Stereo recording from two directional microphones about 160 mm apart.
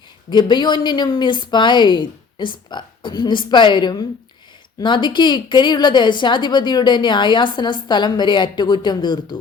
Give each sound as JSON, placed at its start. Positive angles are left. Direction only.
{"t": 0.3, "sound": "a woman's voice", "side_deg": 25}